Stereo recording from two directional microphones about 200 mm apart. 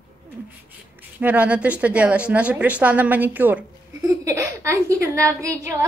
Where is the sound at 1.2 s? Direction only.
5° right (ahead or behind).